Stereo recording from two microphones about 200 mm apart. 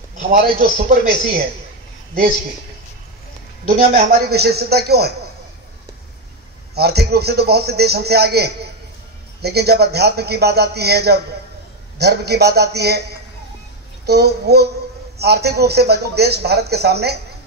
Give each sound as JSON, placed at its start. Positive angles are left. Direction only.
{"t": 0.3, "sound": "a man's voice", "side_deg": -45}
{"t": 3.6, "sound": "a man's voice", "side_deg": -50}
{"t": 6.7, "sound": "a man's voice", "side_deg": -55}
{"t": 14.0, "sound": "a man's voice", "side_deg": -55}